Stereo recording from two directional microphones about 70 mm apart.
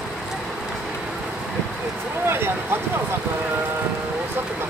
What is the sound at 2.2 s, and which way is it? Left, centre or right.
Speech, right.